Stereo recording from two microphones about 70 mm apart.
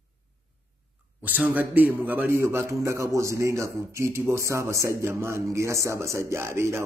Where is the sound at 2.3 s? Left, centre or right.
Right.